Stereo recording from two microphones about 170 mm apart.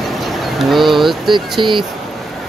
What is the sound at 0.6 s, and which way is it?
Vehicle, centre (ahead or behind).